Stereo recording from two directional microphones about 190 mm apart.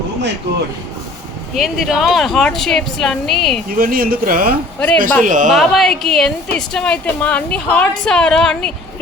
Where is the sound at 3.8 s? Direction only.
50° right (ahead or behind).